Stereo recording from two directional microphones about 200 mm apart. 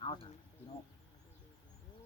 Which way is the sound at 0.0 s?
25° left (ahead or behind).